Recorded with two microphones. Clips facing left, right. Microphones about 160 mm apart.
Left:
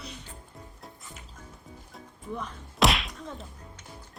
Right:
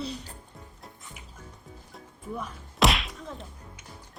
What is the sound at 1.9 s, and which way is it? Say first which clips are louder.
Whack: even; 5° right (ahead or behind).